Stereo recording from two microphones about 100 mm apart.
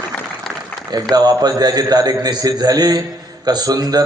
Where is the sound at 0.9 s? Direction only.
40° right (ahead or behind).